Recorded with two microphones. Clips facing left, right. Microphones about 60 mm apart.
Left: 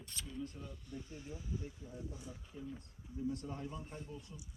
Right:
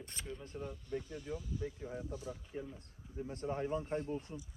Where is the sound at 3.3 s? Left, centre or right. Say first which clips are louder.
Right 9 dB; right.